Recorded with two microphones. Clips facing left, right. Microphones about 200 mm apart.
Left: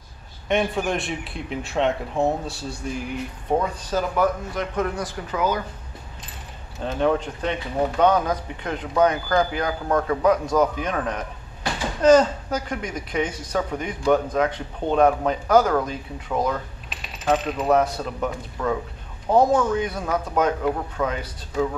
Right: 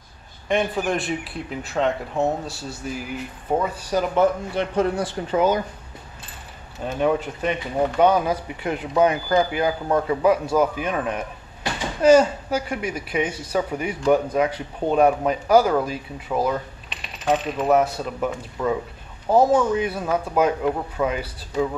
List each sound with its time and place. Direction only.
0.5 s a man's voice: centre (ahead or behind)
4.1 s speech: 25° right (ahead or behind)
6.8 s speech: 10° right (ahead or behind)